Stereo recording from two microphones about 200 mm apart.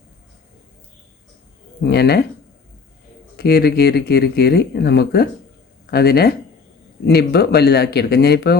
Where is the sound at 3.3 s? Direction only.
50° left (ahead or behind).